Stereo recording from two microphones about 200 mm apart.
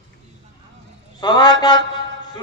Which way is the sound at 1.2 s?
20° left (ahead or behind).